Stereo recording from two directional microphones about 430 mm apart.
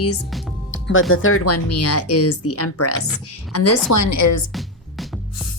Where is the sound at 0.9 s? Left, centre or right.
Left.